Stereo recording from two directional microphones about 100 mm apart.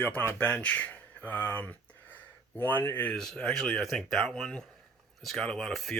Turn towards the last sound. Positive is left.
turn(degrees=5)  # may be behind; listen again after turning